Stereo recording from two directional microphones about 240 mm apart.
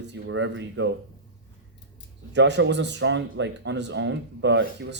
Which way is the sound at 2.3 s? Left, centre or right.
Right.